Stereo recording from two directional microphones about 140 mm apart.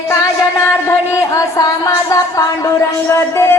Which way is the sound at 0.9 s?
20° left (ahead or behind).